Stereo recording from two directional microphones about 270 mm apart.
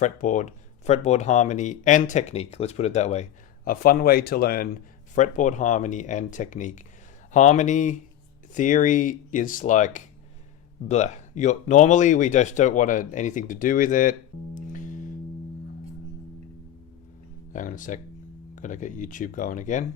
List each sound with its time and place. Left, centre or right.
0.0 s speech: left
17.5 s speech: left